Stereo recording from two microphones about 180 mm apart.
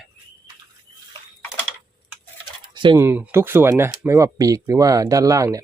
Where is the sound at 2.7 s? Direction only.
25° right (ahead or behind).